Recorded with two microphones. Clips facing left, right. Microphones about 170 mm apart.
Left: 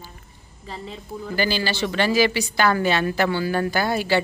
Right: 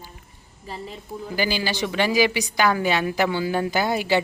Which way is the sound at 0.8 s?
10° right (ahead or behind).